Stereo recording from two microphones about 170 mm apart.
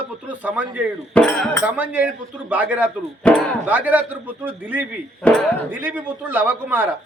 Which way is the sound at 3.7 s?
10° right (ahead or behind).